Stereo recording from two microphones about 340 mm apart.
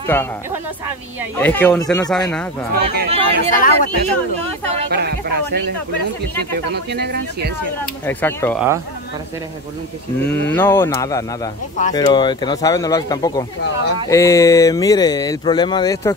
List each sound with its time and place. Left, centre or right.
0.0 s speech: centre
1.4 s speech: centre
2.7 s speech: right
3.5 s speech: left
4.9 s speech: right
6.7 s speech: right
8.1 s speech: centre
10.5 s speech: centre